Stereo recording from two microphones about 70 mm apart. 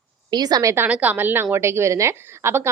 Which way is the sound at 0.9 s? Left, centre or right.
Right.